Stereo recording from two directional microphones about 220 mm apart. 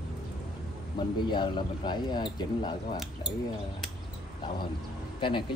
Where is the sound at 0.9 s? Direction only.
20° left (ahead or behind).